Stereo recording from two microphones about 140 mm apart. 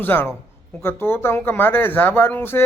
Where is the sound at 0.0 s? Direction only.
15° left (ahead or behind).